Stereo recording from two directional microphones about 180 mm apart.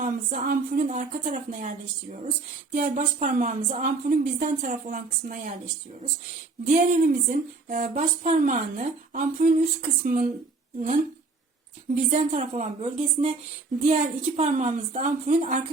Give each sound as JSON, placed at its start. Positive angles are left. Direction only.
{"t": 0.0, "sound": "speech", "side_deg": -50}
{"t": 6.7, "sound": "speech", "side_deg": -45}
{"t": 12.1, "sound": "a woman's voice", "side_deg": -40}